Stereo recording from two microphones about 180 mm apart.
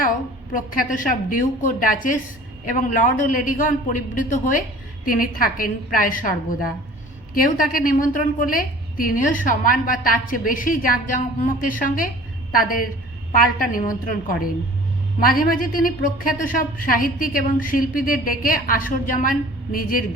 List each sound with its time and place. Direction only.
0.5 s a woman's voice: 50° left (ahead or behind)